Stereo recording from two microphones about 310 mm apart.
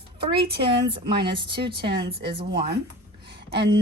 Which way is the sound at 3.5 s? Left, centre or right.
Right.